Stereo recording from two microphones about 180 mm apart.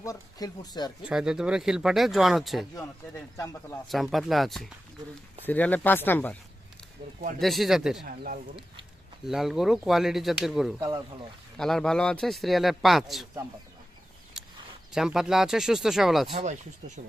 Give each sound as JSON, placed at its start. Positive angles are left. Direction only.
{"t": 0.0, "sound": "speech", "side_deg": 20}
{"t": 1.0, "sound": "speech", "side_deg": -5}
{"t": 3.8, "sound": "speech", "side_deg": 0}
{"t": 7.3, "sound": "speech", "side_deg": 0}
{"t": 8.0, "sound": "speech", "side_deg": -55}
{"t": 9.2, "sound": "speech", "side_deg": 0}
{"t": 10.8, "sound": "speech", "side_deg": -20}
{"t": 11.5, "sound": "speech", "side_deg": 5}
{"t": 14.4, "sound": "a sound", "side_deg": -5}
{"t": 14.9, "sound": "speech", "side_deg": -5}
{"t": 16.3, "sound": "speech", "side_deg": -40}